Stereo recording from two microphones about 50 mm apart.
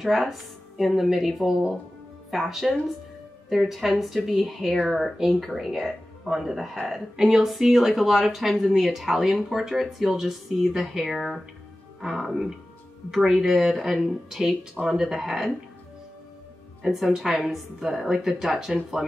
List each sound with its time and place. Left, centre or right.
0.0 s speech: centre
16.8 s speech: centre